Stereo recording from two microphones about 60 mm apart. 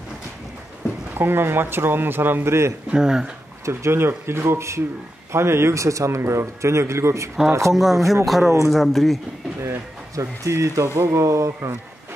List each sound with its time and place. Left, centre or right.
1.1 s speech: right
2.9 s speech: centre
3.6 s speech: right
7.7 s speech: centre
9.6 s speech: right